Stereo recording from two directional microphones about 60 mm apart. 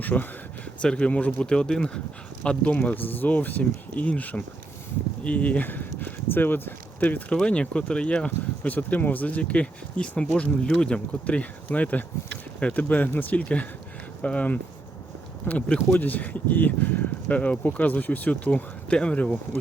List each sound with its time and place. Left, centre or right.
0.0 s speech: left
0.8 s speech: centre
2.7 s speech: left
7.4 s speech: centre
8.6 s speech: left